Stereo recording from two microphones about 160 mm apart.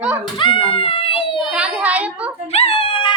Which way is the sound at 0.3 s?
35° left (ahead or behind).